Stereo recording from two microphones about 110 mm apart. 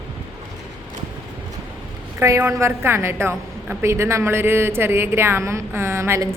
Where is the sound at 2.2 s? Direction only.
25° right (ahead or behind).